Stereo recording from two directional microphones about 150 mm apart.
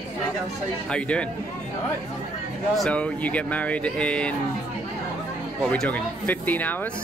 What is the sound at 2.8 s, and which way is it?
Speech, 5° left (ahead or behind).